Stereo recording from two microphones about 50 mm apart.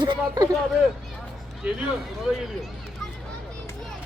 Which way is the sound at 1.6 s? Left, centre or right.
Centre.